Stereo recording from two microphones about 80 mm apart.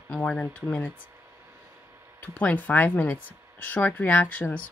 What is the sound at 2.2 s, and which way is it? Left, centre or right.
Speech, centre.